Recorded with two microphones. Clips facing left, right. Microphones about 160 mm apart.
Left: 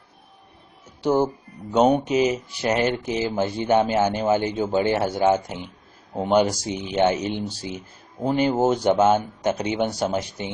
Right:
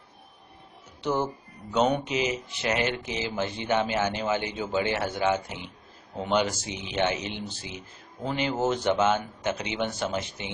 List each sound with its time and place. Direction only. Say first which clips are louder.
1.0 s a man's voice: left 7 dB; 30° left (ahead or behind)